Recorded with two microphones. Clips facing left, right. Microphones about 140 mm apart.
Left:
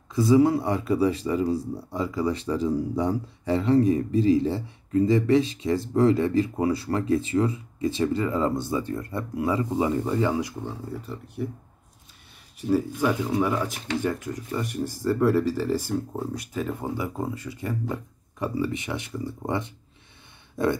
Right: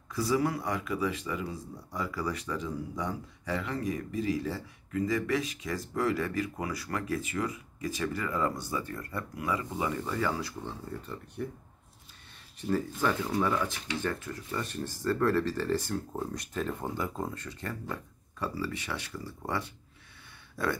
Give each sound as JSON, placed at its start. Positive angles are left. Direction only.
{"t": 0.1, "sound": "speech", "side_deg": 20}
{"t": 12.5, "sound": "speech", "side_deg": 10}